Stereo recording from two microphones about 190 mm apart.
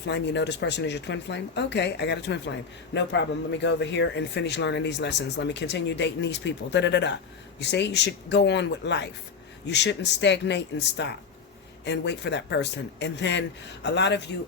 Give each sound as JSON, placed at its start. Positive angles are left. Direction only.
{"t": 0.0, "sound": "speech", "side_deg": 65}